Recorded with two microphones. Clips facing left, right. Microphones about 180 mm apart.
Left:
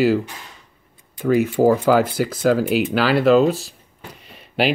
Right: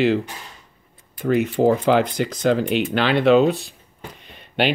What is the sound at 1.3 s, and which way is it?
Speech, 5° left (ahead or behind).